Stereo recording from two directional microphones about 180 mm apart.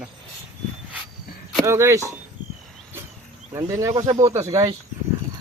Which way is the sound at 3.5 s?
20° right (ahead or behind).